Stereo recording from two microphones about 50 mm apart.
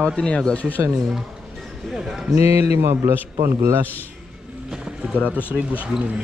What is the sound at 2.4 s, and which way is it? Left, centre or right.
Speech, right.